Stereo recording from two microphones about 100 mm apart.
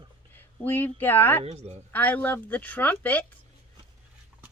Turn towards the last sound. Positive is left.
turn(degrees=15)  # may be behind; listen again after turning